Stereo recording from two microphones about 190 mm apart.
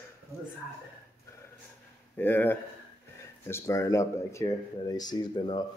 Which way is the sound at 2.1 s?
10° left (ahead or behind).